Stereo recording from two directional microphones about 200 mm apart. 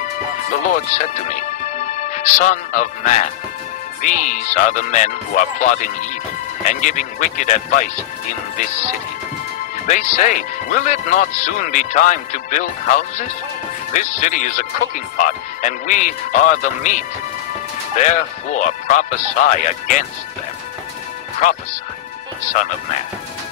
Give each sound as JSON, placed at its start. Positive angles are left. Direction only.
{"t": 0.5, "sound": "speech", "side_deg": 35}
{"t": 9.8, "sound": "speech", "side_deg": 40}
{"t": 13.9, "sound": "speech", "side_deg": 40}
{"t": 22.5, "sound": "speech", "side_deg": 40}